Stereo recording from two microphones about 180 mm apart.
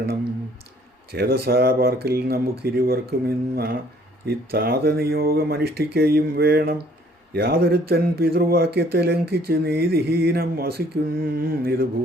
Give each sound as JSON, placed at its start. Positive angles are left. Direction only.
{"t": 1.1, "sound": "speech", "side_deg": -60}